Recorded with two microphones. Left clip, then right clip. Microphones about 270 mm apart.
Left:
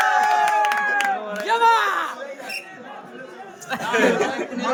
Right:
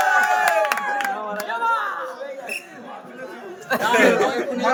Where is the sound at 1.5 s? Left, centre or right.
Left.